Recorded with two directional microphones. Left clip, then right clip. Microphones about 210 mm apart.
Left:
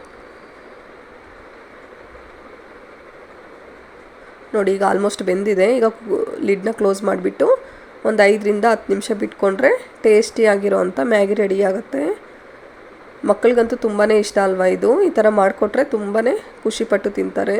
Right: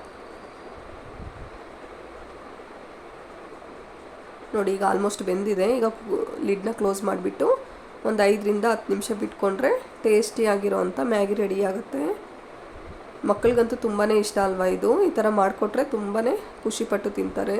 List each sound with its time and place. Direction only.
4.5 s speech: 20° left (ahead or behind)
13.2 s speech: 20° left (ahead or behind)